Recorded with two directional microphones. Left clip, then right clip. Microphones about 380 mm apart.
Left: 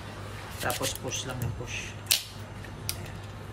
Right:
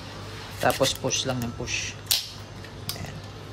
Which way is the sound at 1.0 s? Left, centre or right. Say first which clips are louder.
Right 8 dB; centre.